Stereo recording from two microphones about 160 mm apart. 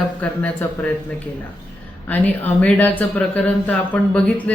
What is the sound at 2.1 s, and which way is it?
A woman's voice, 10° left (ahead or behind).